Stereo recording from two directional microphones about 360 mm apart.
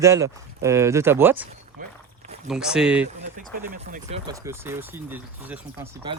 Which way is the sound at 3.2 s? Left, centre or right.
Right.